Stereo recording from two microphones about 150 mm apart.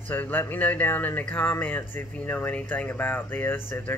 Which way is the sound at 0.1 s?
15° left (ahead or behind).